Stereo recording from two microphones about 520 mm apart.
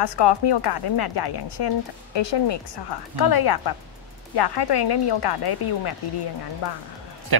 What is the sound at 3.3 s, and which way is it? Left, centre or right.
Speech, left.